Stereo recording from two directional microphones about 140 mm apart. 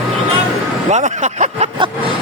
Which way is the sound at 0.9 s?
55° right (ahead or behind).